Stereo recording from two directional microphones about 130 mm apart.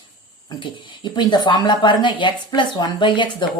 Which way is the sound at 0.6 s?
35° left (ahead or behind).